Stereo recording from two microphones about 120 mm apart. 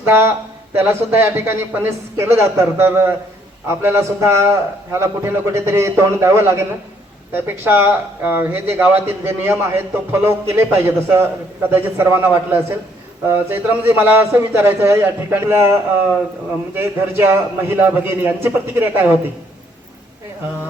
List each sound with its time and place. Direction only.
0.0 s a man's voice: 20° right (ahead or behind)
16.7 s a man's voice: 20° right (ahead or behind)